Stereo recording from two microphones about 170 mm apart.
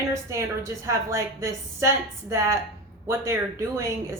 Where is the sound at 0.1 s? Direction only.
15° right (ahead or behind).